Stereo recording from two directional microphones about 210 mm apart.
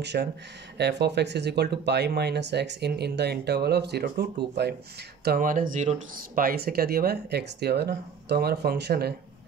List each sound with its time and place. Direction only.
0.0 s speech: 55° right (ahead or behind)